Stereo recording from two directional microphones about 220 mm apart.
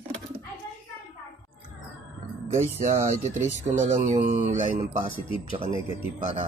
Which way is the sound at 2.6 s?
35° right (ahead or behind).